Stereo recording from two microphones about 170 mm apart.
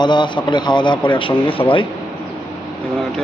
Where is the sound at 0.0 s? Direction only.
25° left (ahead or behind).